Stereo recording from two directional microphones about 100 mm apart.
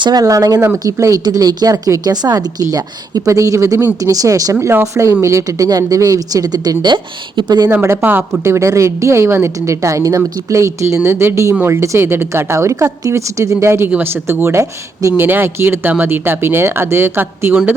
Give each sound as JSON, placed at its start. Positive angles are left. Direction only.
{"t": 0.0, "sound": "a woman's voice", "side_deg": -40}
{"t": 7.7, "sound": "a woman's voice", "side_deg": -25}